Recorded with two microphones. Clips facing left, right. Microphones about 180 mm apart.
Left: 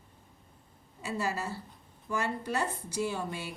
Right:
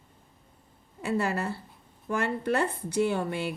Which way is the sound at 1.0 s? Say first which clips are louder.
Right 5 dB; 60° right (ahead or behind).